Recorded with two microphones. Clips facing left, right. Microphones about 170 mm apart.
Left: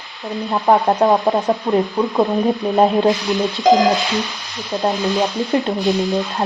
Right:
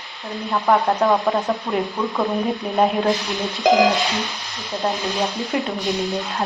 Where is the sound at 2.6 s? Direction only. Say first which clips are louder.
Left 5 dB; 35° left (ahead or behind).